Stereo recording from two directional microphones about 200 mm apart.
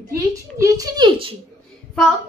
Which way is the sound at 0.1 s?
15° right (ahead or behind).